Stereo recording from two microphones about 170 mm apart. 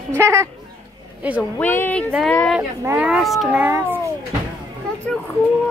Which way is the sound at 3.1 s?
Centre (ahead or behind).